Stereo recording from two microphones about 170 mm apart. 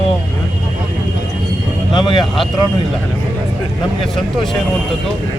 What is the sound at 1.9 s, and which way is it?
Speech, 25° left (ahead or behind).